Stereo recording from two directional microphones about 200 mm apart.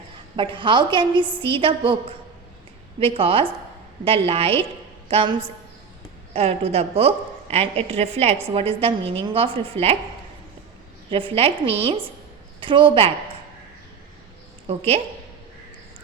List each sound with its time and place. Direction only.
0.3 s a woman's voice: 25° right (ahead or behind)
11.1 s a woman's voice: 25° right (ahead or behind)
14.7 s a woman's voice: 30° right (ahead or behind)